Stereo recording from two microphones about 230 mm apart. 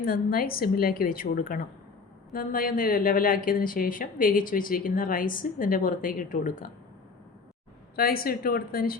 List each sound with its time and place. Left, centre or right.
0.0 s a woman's voice: left
7.9 s a woman's voice: left